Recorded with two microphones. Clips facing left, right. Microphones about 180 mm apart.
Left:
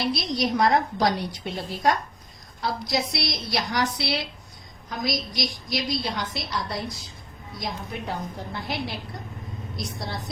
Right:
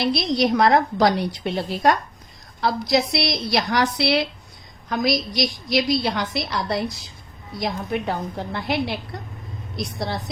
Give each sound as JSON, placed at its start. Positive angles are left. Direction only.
{"t": 0.0, "sound": "a woman's voice", "side_deg": -70}